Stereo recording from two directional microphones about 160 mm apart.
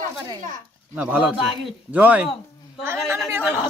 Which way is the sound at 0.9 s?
10° right (ahead or behind).